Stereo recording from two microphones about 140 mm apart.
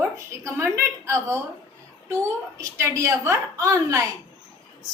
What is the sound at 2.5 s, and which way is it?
A woman's voice, 20° right (ahead or behind).